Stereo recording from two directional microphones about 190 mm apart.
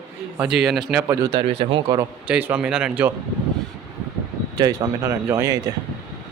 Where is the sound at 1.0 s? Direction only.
15° right (ahead or behind).